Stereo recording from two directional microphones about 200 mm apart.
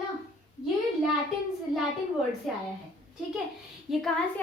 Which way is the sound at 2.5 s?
Centre (ahead or behind).